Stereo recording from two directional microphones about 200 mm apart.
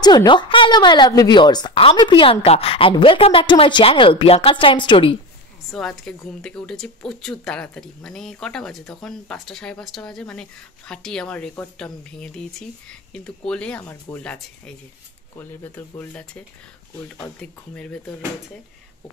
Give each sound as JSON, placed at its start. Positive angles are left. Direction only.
{"t": 0.0, "sound": "a woman's voice", "side_deg": 20}
{"t": 5.7, "sound": "speech", "side_deg": 0}
{"t": 17.4, "sound": "speech", "side_deg": 5}